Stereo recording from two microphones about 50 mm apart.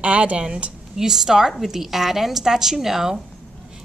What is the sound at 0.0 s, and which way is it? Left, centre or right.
Speech, right.